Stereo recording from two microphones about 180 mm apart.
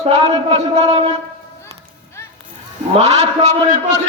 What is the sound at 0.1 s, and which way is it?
A man's voice, 35° right (ahead or behind).